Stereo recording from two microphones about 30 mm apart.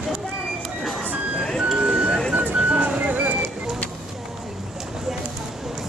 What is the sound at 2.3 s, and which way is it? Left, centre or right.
Music, right.